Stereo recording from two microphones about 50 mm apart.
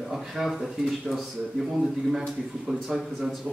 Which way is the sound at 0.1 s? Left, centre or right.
Centre.